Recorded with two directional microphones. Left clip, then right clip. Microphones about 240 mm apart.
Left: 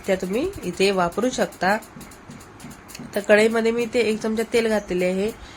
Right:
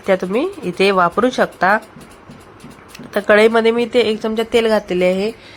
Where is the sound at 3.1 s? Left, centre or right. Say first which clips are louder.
Right 6 dB; centre.